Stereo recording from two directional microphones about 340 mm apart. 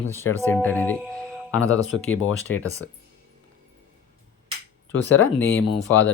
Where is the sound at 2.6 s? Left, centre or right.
Centre.